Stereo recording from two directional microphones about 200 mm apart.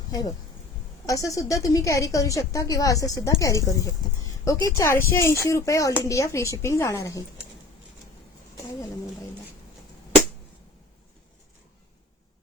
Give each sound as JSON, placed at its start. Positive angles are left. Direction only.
{"t": 0.1, "sound": "a woman's voice", "side_deg": 15}